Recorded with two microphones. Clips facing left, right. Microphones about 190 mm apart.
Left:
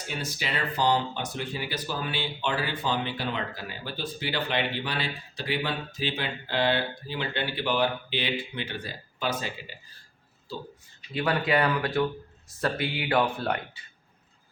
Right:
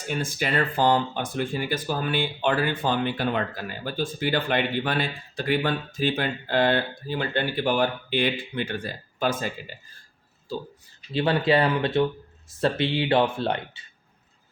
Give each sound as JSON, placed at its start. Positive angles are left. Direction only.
{"t": 0.1, "sound": "speech", "side_deg": -50}
{"t": 11.1, "sound": "speech", "side_deg": -30}